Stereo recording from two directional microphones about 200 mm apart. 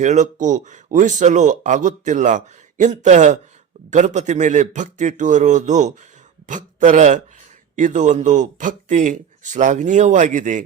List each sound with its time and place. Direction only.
0.0 s speech: 35° right (ahead or behind)